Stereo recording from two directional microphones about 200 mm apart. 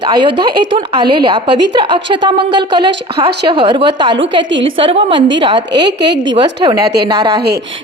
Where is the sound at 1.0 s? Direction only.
25° right (ahead or behind).